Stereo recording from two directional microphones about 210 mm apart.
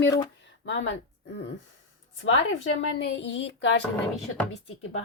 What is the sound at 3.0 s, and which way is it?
Speech, 60° left (ahead or behind).